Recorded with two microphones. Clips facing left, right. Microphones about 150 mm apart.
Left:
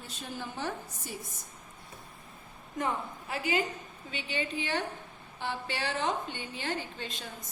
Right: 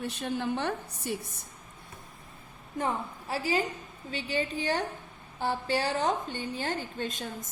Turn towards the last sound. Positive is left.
turn(degrees=-45)  # may be behind; listen again after turning